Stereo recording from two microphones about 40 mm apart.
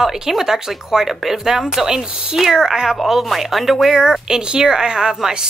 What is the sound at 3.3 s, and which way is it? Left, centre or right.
Speech, centre.